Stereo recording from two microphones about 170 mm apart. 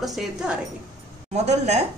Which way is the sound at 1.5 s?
40° right (ahead or behind).